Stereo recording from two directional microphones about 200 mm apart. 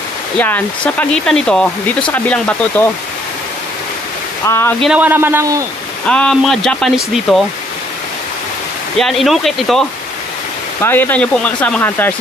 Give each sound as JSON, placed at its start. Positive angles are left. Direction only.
{"t": 0.4, "sound": "speech", "side_deg": 10}
{"t": 4.5, "sound": "speech", "side_deg": 10}
{"t": 4.7, "sound": "a man's voice", "side_deg": -5}
{"t": 6.0, "sound": "speech", "side_deg": 5}
{"t": 8.9, "sound": "speech", "side_deg": 0}